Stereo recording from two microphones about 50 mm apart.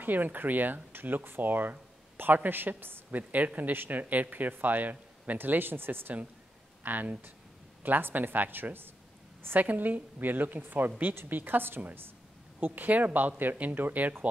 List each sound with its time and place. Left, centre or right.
0.0 s a man's voice: right